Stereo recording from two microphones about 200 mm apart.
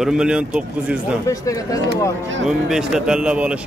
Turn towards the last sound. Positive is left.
turn(degrees=-5)  # may be behind; listen again after turning